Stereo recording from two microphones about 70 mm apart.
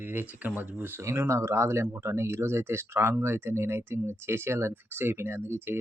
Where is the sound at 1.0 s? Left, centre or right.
Right.